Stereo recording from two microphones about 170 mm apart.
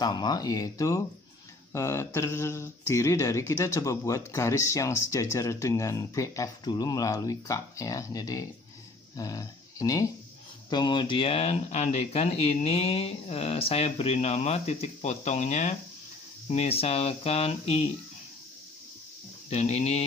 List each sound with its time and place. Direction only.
0.0 s speech: 25° left (ahead or behind)
19.5 s speech: 40° left (ahead or behind)